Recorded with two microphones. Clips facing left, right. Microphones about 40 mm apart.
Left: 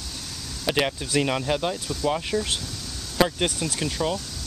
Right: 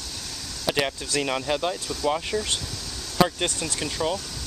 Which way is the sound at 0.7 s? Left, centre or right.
Centre.